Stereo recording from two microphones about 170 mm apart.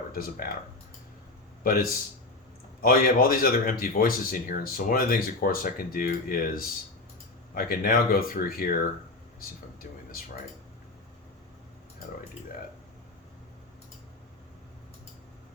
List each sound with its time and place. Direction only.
0.1 s speech: 60° left (ahead or behind)
1.6 s speech: 60° left (ahead or behind)